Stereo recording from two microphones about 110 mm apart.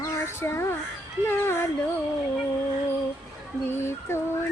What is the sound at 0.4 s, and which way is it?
Speech, 20° left (ahead or behind).